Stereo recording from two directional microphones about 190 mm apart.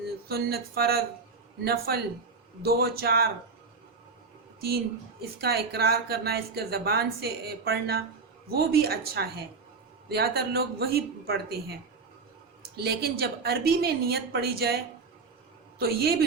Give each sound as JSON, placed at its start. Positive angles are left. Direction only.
{"t": 0.0, "sound": "speech", "side_deg": -55}
{"t": 5.4, "sound": "speech", "side_deg": -55}
{"t": 15.8, "sound": "speech", "side_deg": -55}